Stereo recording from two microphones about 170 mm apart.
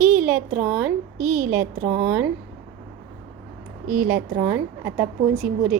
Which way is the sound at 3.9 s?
10° right (ahead or behind).